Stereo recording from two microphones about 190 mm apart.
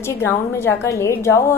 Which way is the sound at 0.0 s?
15° left (ahead or behind).